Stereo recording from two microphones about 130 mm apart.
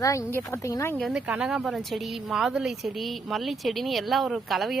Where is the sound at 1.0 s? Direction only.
5° right (ahead or behind).